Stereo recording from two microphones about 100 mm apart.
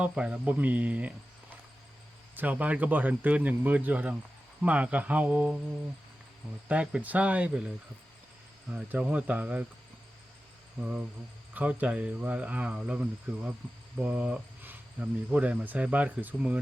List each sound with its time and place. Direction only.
0.0 s speech: 10° right (ahead or behind)
2.3 s speech: 15° right (ahead or behind)
6.7 s speech: 15° right (ahead or behind)
8.7 s speech: 10° right (ahead or behind)
10.8 s speech: 10° right (ahead or behind)
14.0 s cricket: 10° right (ahead or behind)
15.3 s speech: 15° right (ahead or behind)